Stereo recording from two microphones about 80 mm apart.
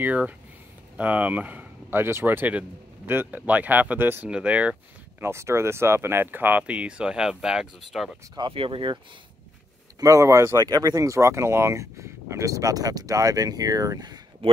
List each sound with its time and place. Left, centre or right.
0.0 s speech: centre
5.2 s speech: right
6.6 s speech: centre
8.4 s speech: right
9.9 s speech: right
10.6 s speech: right